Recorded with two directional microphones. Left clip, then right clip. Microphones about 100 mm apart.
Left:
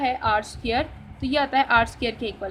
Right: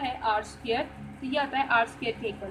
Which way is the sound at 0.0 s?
65° left (ahead or behind).